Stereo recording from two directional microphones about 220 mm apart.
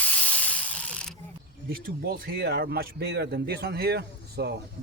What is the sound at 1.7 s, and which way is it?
Speech, 40° right (ahead or behind).